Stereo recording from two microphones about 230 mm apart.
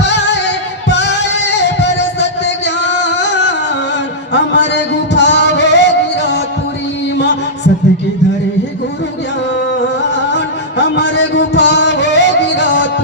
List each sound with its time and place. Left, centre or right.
0.9 s music: left
4.3 s music: left
10.3 s music: left